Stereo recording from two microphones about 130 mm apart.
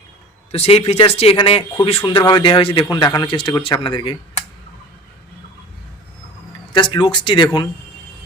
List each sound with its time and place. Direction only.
0.5 s speech: 55° left (ahead or behind)
6.7 s speech: 40° left (ahead or behind)